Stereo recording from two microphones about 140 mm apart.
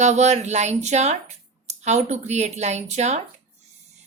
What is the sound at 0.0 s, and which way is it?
A woman's voice, 55° right (ahead or behind).